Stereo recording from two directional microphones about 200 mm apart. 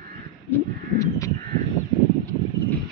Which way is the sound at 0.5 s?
15° left (ahead or behind).